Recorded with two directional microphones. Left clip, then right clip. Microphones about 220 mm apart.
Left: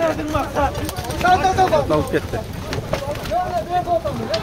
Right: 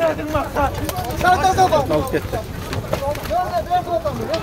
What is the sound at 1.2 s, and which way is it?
Speech, 55° right (ahead or behind).